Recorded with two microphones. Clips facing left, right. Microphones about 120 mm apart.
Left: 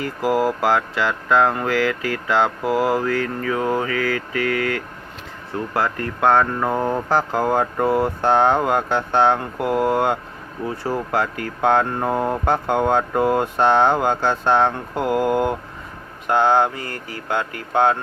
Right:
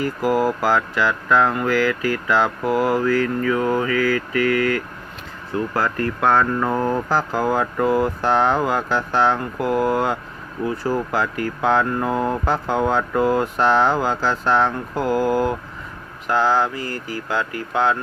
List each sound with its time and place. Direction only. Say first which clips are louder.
0.0 s speech: right 1 dB; 25° left (ahead or behind)